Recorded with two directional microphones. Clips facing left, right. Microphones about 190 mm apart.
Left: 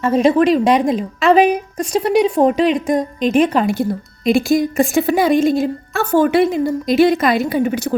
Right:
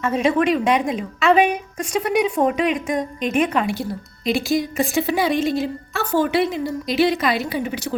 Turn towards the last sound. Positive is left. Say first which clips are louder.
# left 7 dB
turn(degrees=50)  # may be behind; listen again after turning